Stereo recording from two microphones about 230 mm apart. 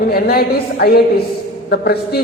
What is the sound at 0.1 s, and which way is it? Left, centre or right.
A man's voice, left.